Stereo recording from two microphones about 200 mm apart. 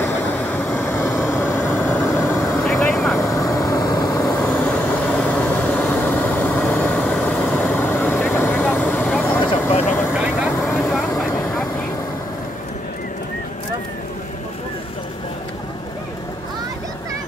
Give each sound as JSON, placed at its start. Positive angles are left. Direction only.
{"t": 0.0, "sound": "vehicle", "side_deg": 10}
{"t": 2.6, "sound": "vehicle", "side_deg": 0}
{"t": 3.2, "sound": "vehicle", "side_deg": 15}
{"t": 4.4, "sound": "vehicle", "side_deg": 5}
{"t": 10.1, "sound": "vehicle", "side_deg": -5}